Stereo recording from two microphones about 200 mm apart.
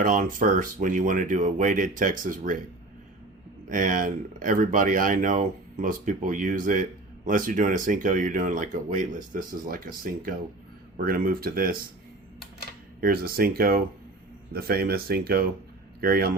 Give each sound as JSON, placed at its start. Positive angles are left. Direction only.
{"t": 0.0, "sound": "speech", "side_deg": -40}
{"t": 3.7, "sound": "speech", "side_deg": -40}
{"t": 13.0, "sound": "a man's voice", "side_deg": -45}